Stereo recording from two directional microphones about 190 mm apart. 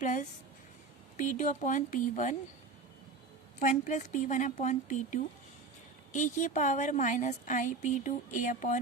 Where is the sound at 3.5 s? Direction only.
40° left (ahead or behind).